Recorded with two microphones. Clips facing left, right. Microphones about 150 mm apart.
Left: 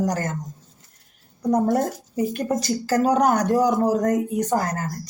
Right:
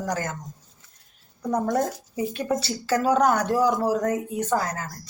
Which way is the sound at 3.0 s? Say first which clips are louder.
Left 1 dB; 15° left (ahead or behind).